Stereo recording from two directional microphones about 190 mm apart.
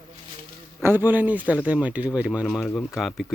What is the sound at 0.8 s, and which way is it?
Speech, 10° right (ahead or behind).